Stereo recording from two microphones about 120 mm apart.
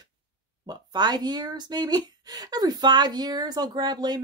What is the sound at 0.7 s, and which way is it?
Speech, 35° right (ahead or behind).